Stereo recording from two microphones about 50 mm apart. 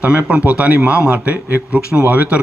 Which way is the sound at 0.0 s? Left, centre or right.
Right.